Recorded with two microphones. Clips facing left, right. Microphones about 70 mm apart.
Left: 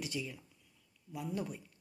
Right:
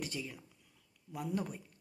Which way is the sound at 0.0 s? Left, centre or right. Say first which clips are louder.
Left 1 dB; right.